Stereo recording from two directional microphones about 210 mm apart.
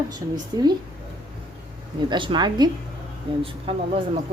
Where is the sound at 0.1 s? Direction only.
20° right (ahead or behind).